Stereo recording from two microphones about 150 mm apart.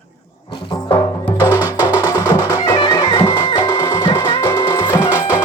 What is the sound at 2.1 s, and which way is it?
Music, 20° left (ahead or behind).